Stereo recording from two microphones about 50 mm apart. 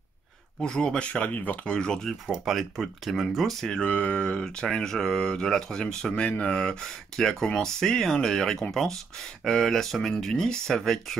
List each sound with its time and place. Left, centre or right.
0.6 s speech: centre; by 1.7 s left
1.7 s speech: centre
2.2 s speech: centre
3.8 s speech: left; by 11.1 s centre